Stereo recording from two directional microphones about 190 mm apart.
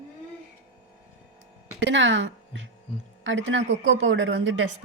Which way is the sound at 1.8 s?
75° right (ahead or behind).